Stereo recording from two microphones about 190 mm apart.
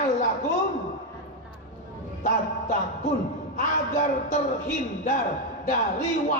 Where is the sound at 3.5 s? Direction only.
40° left (ahead or behind).